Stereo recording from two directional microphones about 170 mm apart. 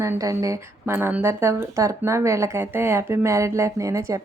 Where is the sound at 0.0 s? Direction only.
20° right (ahead or behind).